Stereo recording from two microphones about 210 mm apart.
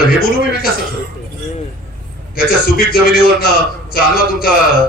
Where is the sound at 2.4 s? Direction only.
45° left (ahead or behind).